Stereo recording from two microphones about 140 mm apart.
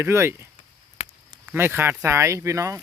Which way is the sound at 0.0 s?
15° right (ahead or behind).